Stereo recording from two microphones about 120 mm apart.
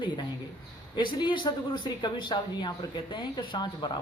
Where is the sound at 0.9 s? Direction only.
40° left (ahead or behind).